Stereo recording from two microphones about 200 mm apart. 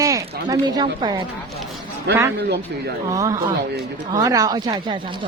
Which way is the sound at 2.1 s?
60° right (ahead or behind).